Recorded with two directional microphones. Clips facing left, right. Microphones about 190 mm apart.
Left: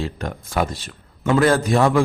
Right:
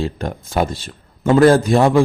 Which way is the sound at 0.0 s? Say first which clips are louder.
Right 4 dB; 30° right (ahead or behind).